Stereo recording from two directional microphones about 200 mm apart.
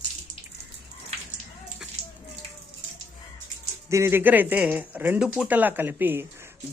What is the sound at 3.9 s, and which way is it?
Speech, 10° right (ahead or behind).